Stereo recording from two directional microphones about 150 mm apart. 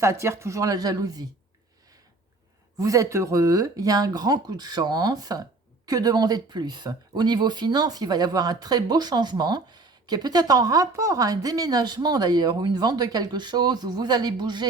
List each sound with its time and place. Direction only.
0.0 s speech: 20° right (ahead or behind)
2.7 s speech: 20° right (ahead or behind)